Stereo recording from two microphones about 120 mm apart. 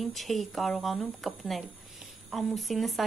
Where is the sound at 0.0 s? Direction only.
Centre (ahead or behind).